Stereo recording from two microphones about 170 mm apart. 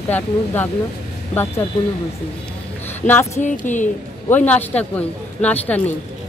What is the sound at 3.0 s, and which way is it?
Speech, 15° left (ahead or behind).